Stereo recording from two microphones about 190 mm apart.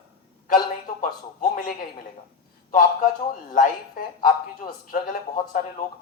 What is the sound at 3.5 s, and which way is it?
A man's voice, 50° left (ahead or behind).